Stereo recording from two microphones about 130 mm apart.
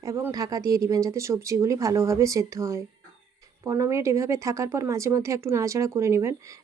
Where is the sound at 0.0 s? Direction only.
25° right (ahead or behind).